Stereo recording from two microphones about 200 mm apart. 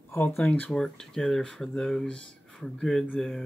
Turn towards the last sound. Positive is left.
turn(degrees=0)  # may be behind; listen again after turning